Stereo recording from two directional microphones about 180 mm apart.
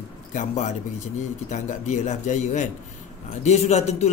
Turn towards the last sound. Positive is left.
turn(degrees=40)  # may be behind; listen again after turning